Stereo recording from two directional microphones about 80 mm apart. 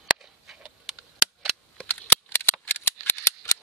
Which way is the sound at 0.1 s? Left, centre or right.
Centre.